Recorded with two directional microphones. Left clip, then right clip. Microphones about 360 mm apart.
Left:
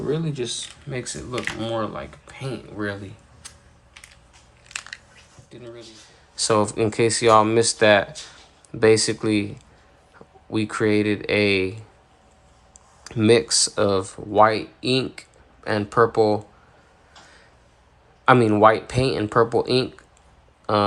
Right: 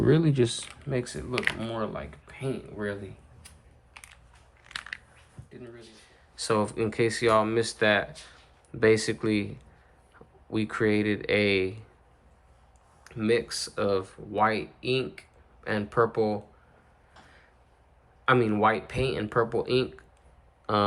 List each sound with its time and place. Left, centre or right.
0.1 s speech: centre
0.9 s speech: centre
6.3 s speech: centre
13.1 s speech: centre
18.3 s speech: centre